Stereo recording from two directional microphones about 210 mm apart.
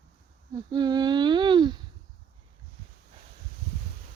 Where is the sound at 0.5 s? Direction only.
20° right (ahead or behind).